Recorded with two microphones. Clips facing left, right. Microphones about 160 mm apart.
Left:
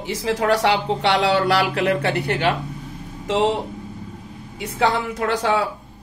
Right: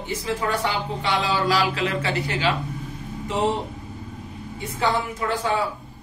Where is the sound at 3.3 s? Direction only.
90° left.